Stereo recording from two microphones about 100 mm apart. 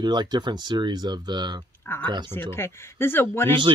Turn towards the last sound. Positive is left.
turn(degrees=25)  # may be behind; listen again after turning